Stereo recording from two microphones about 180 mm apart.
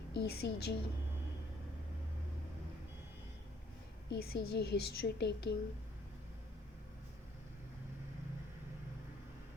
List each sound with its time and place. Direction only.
0.1 s a woman's voice: 70° left (ahead or behind)
4.1 s a woman's voice: 65° left (ahead or behind)